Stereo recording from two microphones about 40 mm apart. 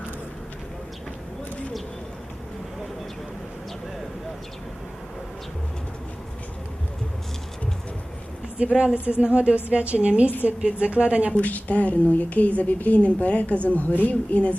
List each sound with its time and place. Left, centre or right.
9.0 s speech: right
11.3 s a woman's voice: left